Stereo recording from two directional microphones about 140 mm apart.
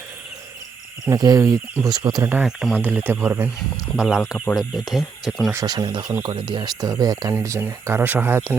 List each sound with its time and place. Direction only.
1.0 s speech: 25° right (ahead or behind)
2.2 s speech: 10° right (ahead or behind)
3.1 s speech: 15° right (ahead or behind)
3.9 s speech: 5° right (ahead or behind)
5.5 s speech: 25° right (ahead or behind)
7.3 s speech: 15° right (ahead or behind)